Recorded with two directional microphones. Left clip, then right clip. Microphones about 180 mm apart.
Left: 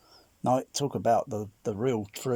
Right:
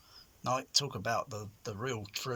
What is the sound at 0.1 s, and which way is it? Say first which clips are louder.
Speech: left 7 dB; 40° left (ahead or behind).